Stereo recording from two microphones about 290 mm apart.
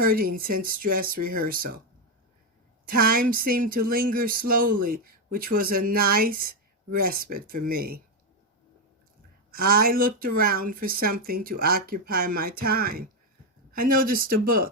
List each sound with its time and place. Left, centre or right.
0.0 s speech: right
2.9 s speech: right
9.5 s speech: right